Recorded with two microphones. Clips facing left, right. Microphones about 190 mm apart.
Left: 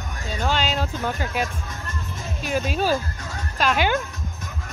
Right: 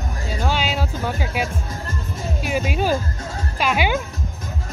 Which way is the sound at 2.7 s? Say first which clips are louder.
Right 1 dB; 15° right (ahead or behind).